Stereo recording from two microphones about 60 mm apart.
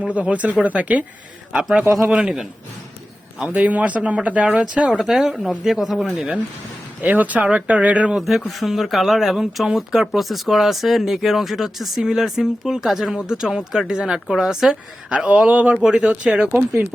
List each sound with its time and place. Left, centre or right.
0.1 s speech: right
1.9 s speech: right
3.3 s speech: centre
4.9 s speech: centre
7.0 s speech: right
8.1 s speech: centre
15.1 s speech: right